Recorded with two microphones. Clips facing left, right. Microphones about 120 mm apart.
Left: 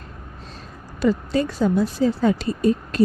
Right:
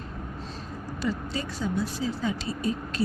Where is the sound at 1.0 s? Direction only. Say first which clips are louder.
Left 11 dB; 55° left (ahead or behind).